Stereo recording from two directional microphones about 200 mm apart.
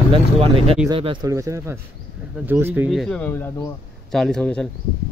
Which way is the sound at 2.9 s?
Centre (ahead or behind).